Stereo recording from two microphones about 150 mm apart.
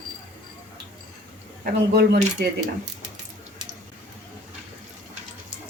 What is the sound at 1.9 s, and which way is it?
Speech, 90° right.